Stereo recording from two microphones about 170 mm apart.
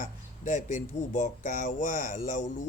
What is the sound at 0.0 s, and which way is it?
Speech, 50° left (ahead or behind).